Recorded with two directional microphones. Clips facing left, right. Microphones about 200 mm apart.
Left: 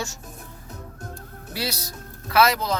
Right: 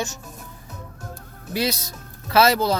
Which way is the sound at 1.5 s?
20° right (ahead or behind).